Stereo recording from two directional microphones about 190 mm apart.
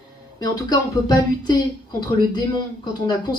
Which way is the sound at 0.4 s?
20° left (ahead or behind).